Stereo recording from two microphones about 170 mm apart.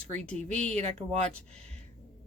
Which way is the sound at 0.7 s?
40° right (ahead or behind).